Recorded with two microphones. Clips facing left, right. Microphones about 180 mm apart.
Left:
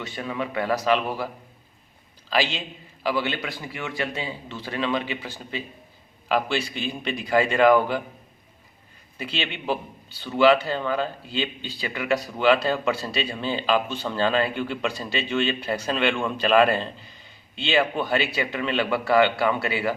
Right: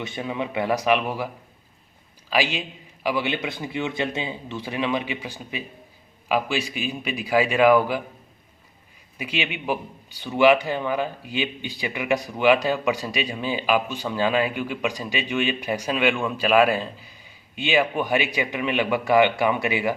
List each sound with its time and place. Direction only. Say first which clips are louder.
0.0 s speech: right 1 dB; 20° right (ahead or behind)
2.3 s speech: right 1 dB; 10° right (ahead or behind)
9.1 s speech: right 2 dB; 10° right (ahead or behind)